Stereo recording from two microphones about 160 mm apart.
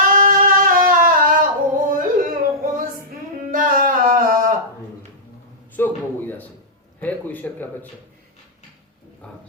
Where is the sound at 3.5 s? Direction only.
60° right (ahead or behind).